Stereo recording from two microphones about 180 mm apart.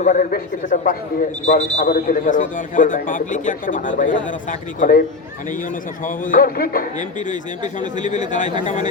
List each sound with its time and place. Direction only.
0.0 s a man's voice: 45° left (ahead or behind)
6.1 s a man's voice: 50° left (ahead or behind)
7.3 s a man's voice: 45° left (ahead or behind)